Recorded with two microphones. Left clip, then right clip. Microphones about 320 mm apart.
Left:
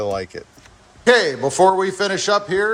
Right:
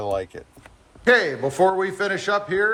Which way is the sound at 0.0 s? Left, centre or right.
Centre.